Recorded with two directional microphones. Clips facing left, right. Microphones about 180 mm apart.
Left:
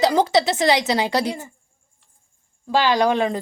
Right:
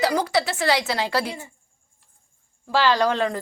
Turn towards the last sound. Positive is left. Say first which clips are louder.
# left 2 dB
turn(degrees=15)  # may be behind; listen again after turning